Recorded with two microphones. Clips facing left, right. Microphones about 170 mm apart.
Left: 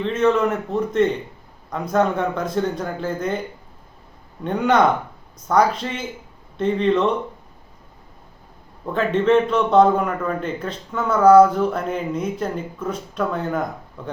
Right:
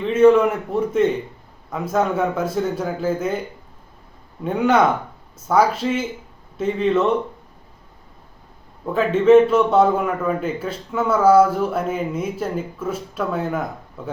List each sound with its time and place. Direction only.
0.1 s a man's voice: 10° right (ahead or behind)
4.4 s speech: 5° right (ahead or behind)
8.9 s a man's voice: 5° right (ahead or behind)